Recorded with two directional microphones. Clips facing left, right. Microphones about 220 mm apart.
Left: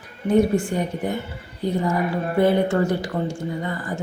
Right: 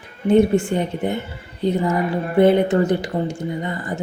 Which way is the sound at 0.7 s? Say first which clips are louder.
Right 2 dB; 25° right (ahead or behind).